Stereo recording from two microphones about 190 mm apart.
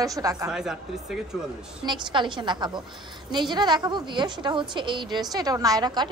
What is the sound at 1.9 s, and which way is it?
A woman's voice, 25° right (ahead or behind).